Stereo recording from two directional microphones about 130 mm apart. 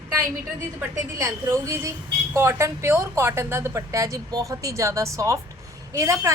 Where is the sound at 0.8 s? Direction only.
20° right (ahead or behind).